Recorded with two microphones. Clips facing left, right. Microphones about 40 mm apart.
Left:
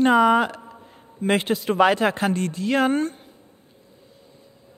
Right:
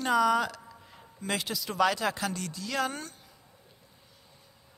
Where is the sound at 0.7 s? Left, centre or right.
Left.